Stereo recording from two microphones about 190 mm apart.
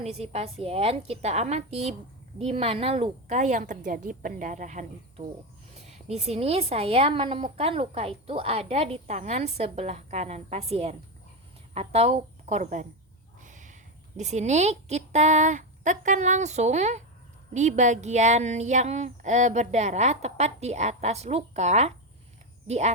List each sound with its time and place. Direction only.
0.0 s a woman's voice: 35° right (ahead or behind)
13.4 s a sound: 40° right (ahead or behind)
14.2 s a woman's voice: 35° right (ahead or behind)